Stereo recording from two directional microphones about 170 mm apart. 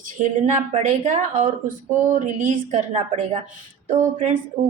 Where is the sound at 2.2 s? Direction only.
45° right (ahead or behind).